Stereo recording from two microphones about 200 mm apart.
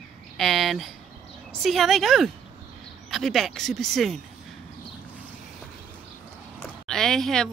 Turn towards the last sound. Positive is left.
turn(degrees=0)  # may be behind; listen again after turning